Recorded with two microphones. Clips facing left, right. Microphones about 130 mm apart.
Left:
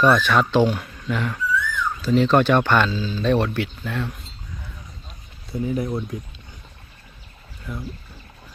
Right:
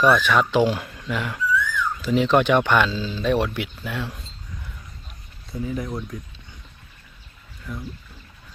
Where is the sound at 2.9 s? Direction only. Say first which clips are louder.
Left 2 dB; 25° right (ahead or behind).